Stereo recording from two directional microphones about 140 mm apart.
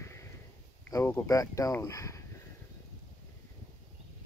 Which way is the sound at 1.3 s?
25° left (ahead or behind).